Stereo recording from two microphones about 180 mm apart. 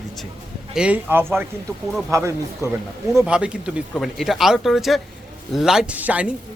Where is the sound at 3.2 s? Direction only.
5° right (ahead or behind).